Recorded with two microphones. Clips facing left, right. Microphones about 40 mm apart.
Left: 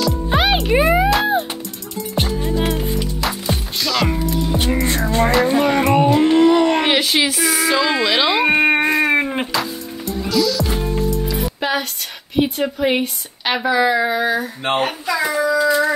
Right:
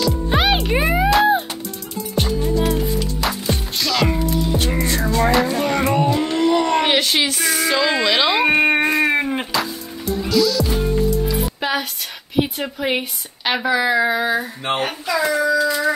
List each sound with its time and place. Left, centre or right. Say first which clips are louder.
0.0 s music: left 1 dB; centre
2.2 s music: even; centre
2.5 s music: right 1 dB; left
3.2 s music: even; centre
5.6 s a sound: left 3 dB; centre
5.9 s a sound: left 5 dB; left
6.5 s a sound: left 2 dB; centre
10.2 s music: right 1 dB; centre
12.4 s a woman's voice: left 3 dB; centre
15.5 s howl: left 2 dB; centre